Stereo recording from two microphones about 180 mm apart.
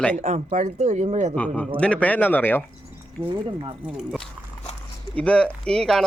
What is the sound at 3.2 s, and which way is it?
Speech, 25° right (ahead or behind).